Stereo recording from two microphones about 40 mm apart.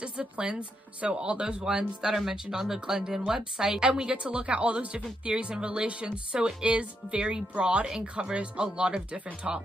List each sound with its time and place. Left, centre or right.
0.0 s speech: right
2.1 s speech: centre; by 9.6 s right